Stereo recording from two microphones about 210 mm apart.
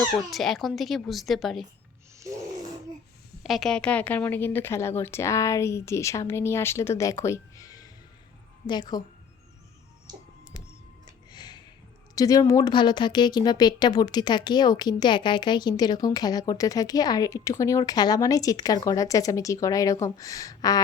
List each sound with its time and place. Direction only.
0.3 s speech: centre (ahead or behind)
2.1 s music: 15° right (ahead or behind)
3.4 s a woman's voice: centre (ahead or behind); by 9.0 s 20° left (ahead or behind)
11.3 s a sound: 20° left (ahead or behind)
12.1 s speech: 15° left (ahead or behind)